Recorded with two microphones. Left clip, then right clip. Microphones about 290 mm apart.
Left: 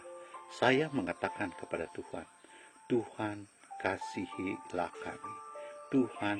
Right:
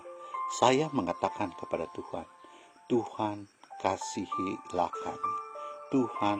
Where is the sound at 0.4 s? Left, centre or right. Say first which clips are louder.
Right 4 dB; right.